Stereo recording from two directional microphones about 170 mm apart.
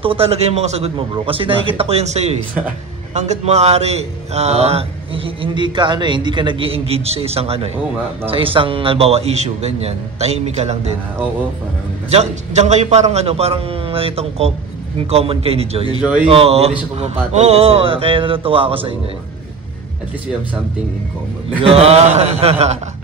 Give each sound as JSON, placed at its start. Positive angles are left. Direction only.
{"t": 0.0, "sound": "a man's voice", "side_deg": -35}
{"t": 12.1, "sound": "a man's voice", "side_deg": -40}
{"t": 21.6, "sound": "a man's voice", "side_deg": -35}